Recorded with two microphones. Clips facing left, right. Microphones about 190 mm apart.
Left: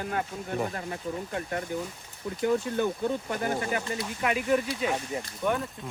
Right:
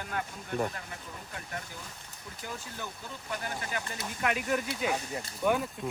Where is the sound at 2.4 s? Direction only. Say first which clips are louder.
Left 16 dB; 60° left (ahead or behind).